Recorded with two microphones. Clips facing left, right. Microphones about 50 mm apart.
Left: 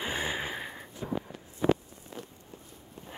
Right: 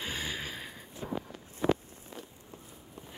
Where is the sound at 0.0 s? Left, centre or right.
Left.